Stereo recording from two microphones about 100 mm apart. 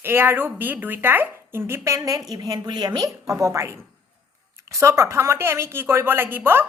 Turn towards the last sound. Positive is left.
turn(degrees=-20)  # may be behind; listen again after turning